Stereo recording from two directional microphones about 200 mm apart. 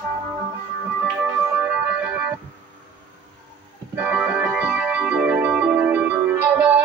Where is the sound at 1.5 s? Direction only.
10° right (ahead or behind).